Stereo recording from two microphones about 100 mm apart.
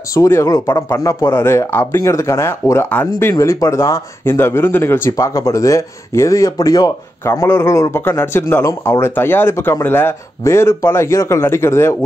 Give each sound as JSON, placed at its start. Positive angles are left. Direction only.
{"t": 0.1, "sound": "speech", "side_deg": 30}
{"t": 5.1, "sound": "speech", "side_deg": 35}
{"t": 9.1, "sound": "speech", "side_deg": 20}